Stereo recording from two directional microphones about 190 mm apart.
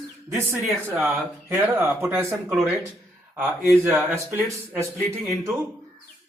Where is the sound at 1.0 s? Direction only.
10° right (ahead or behind).